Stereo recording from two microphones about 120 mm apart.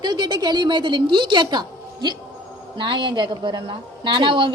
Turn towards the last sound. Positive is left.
turn(degrees=-45)  # may be behind; listen again after turning